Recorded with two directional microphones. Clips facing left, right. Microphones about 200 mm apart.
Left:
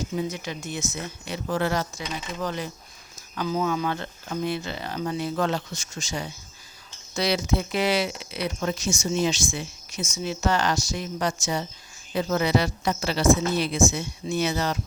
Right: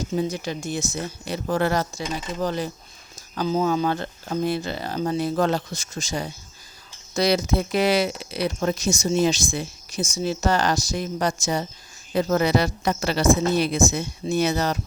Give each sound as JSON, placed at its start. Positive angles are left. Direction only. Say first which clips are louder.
{"t": 0.2, "sound": "speech", "louder": "right 4 dB", "side_deg": -35}
{"t": 2.4, "sound": "speech", "louder": "right 5 dB", "side_deg": -35}